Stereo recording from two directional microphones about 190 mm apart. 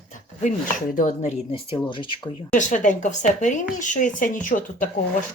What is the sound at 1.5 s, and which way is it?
Speech, 30° left (ahead or behind).